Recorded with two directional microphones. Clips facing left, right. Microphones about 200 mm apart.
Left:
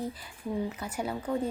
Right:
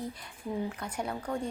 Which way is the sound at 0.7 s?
5° left (ahead or behind).